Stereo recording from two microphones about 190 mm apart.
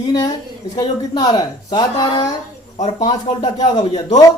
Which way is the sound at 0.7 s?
20° left (ahead or behind).